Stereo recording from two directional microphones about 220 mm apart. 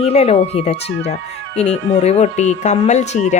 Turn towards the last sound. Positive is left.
turn(degrees=35)  # may be behind; listen again after turning